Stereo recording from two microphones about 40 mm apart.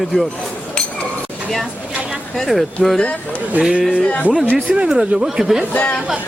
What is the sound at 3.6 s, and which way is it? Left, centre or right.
Speech, right.